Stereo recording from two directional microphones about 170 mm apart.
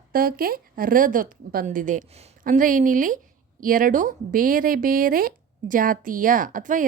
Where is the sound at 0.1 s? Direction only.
60° right (ahead or behind).